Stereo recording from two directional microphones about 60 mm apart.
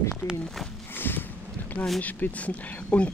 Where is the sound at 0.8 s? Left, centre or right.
Left.